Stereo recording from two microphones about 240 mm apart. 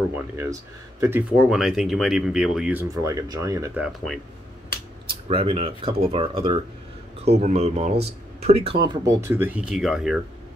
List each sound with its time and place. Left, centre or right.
0.1 s speech: centre
5.3 s speech: right; by 10.2 s centre